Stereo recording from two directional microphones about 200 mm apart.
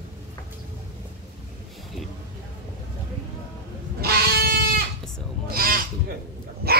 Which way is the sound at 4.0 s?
50° right (ahead or behind).